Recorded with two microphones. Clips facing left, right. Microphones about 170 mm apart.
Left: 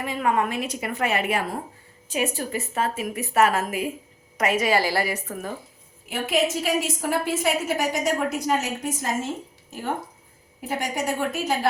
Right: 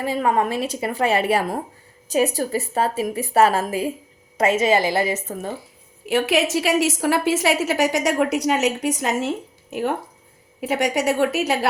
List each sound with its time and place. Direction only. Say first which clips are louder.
0.0 s a woman's voice: right 3 dB; 35° right (ahead or behind)
6.1 s a woman's voice: right 4 dB; 80° right